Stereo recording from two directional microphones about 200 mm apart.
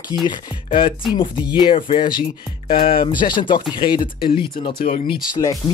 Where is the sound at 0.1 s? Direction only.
20° left (ahead or behind).